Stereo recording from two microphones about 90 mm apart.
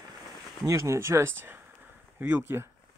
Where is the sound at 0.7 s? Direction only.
35° right (ahead or behind).